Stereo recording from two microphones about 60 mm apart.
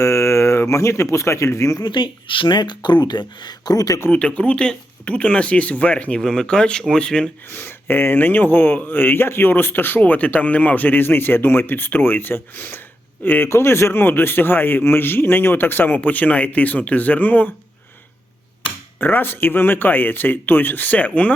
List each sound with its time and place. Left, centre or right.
0.0 s speech: left
3.7 s speech: left
4.1 s speech: centre
7.5 s a man's voice: left
13.5 s a man's voice: left
18.9 s a man's voice: left